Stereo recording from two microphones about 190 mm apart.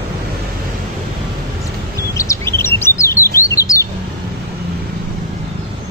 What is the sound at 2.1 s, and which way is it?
Chirp, 15° left (ahead or behind).